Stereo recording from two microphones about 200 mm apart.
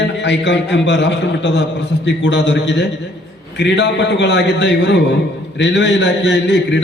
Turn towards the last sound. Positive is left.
turn(degrees=60)  # may be behind; listen again after turning